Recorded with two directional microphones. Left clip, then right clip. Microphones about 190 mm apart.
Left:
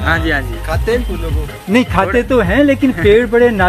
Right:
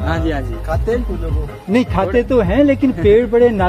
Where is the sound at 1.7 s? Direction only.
10° left (ahead or behind).